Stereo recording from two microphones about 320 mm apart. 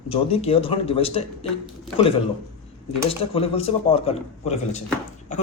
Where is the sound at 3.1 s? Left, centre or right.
Centre.